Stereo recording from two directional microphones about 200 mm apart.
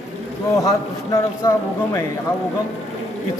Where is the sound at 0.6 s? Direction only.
15° left (ahead or behind).